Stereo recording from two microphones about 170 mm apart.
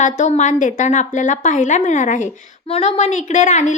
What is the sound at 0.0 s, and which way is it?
A woman's voice, 45° left (ahead or behind).